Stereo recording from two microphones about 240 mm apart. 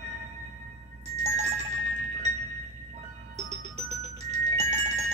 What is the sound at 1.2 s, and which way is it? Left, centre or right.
Music, right.